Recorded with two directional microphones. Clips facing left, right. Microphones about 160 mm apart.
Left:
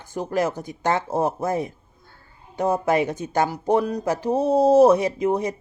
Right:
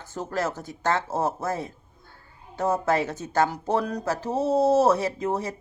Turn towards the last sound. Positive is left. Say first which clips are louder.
# left 5 dB
turn(degrees=15)  # may be behind; listen again after turning